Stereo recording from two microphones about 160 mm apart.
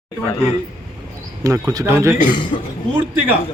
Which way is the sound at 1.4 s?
20° right (ahead or behind).